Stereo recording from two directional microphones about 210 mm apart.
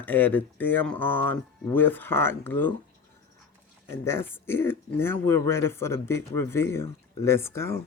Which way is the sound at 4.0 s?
10° left (ahead or behind).